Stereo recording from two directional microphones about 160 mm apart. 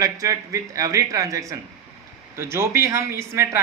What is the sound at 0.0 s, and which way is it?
Speech, 20° right (ahead or behind).